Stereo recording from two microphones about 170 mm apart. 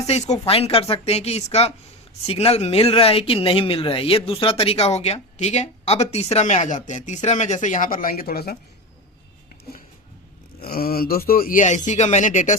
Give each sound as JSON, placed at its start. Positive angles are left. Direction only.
{"t": 0.0, "sound": "speech", "side_deg": 40}
{"t": 10.6, "sound": "speech", "side_deg": 65}